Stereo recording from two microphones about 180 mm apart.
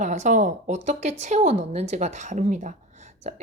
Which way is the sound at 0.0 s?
40° right (ahead or behind).